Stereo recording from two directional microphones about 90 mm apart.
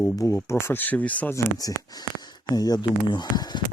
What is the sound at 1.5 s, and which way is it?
Speech, 45° left (ahead or behind).